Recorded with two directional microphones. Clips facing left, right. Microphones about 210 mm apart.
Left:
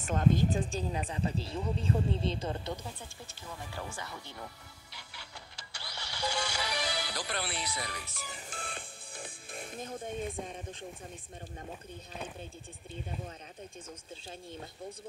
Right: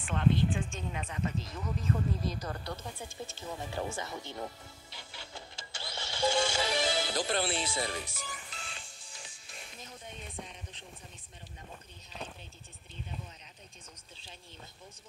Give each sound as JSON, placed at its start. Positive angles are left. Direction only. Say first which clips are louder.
{"t": 0.0, "sound": "speech", "louder": "left 1 dB", "side_deg": 40}
{"t": 3.3, "sound": "speech", "louder": "right 5 dB", "side_deg": -25}
{"t": 4.9, "sound": "music", "louder": "right 3 dB", "side_deg": -25}
{"t": 8.4, "sound": "music", "louder": "left 5 dB", "side_deg": 50}
{"t": 10.4, "sound": "speech", "louder": "left 8 dB", "side_deg": 50}